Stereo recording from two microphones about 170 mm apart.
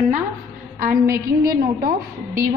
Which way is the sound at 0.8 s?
55° right (ahead or behind).